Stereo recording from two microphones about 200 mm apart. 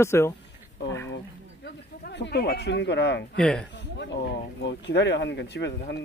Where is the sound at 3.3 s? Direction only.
5° left (ahead or behind).